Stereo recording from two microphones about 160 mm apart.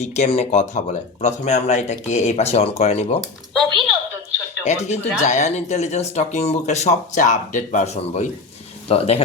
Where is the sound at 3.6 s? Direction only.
30° right (ahead or behind).